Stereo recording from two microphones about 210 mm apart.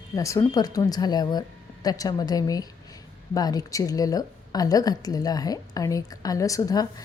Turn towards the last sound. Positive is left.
turn(degrees=15)  # may be behind; listen again after turning